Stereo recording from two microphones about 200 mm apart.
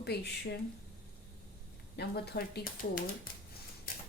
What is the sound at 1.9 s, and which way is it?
Speech, 55° left (ahead or behind).